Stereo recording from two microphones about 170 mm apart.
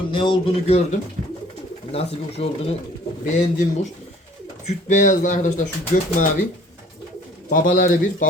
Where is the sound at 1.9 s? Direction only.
35° left (ahead or behind).